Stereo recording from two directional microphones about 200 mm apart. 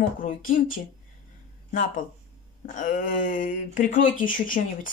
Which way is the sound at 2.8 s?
45° left (ahead or behind).